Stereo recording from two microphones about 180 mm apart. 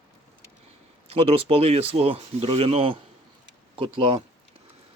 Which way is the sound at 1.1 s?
35° right (ahead or behind).